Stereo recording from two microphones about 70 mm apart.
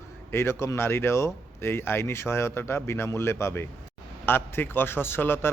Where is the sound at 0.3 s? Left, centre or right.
Left.